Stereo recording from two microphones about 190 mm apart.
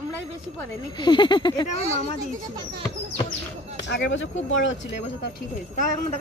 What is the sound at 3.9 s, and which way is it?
Speech, 75° left (ahead or behind).